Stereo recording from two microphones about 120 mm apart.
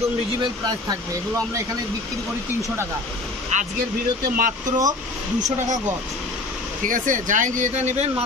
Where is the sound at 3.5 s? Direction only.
80° right.